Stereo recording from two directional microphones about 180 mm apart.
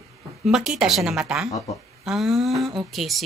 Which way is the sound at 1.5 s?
20° left (ahead or behind).